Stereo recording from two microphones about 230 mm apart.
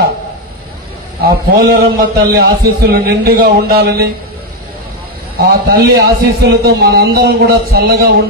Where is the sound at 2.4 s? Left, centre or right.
Right.